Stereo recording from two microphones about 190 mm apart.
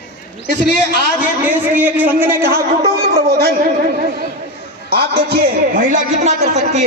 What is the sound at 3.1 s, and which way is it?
Speech, 55° right (ahead or behind).